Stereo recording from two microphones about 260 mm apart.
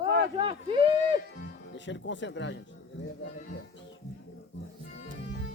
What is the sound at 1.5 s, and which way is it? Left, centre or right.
Speech, left.